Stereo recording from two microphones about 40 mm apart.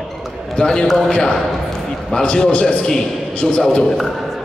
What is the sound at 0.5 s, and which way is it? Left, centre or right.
A man's voice, centre.